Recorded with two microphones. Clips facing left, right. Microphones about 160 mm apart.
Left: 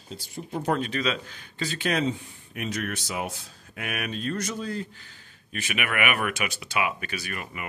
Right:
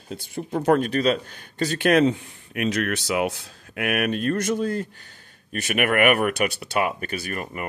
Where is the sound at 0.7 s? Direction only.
45° right (ahead or behind).